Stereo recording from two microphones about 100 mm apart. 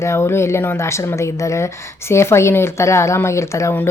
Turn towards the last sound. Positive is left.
turn(degrees=30)  # may be behind; listen again after turning